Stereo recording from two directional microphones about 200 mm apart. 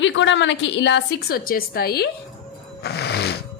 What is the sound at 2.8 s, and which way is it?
Music, 55° left (ahead or behind).